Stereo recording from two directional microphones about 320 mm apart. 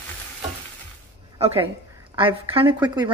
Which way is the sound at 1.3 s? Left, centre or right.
Centre.